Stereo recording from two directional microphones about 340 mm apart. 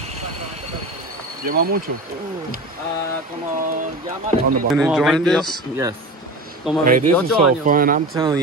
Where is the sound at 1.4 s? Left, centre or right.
Right.